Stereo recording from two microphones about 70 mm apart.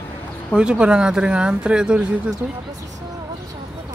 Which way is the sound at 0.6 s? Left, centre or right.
Centre.